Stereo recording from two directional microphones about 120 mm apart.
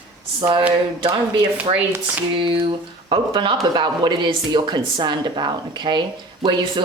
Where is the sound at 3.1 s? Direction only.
45° right (ahead or behind).